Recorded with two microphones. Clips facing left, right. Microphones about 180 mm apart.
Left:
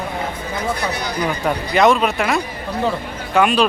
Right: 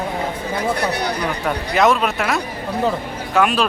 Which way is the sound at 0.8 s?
65° right (ahead or behind).